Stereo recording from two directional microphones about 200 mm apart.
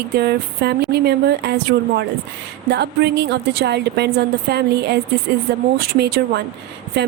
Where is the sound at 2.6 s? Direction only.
55° right (ahead or behind).